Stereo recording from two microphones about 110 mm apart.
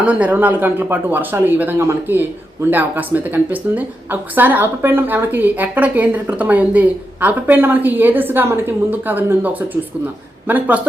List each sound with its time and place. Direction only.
0.0 s a woman's voice: 15° right (ahead or behind)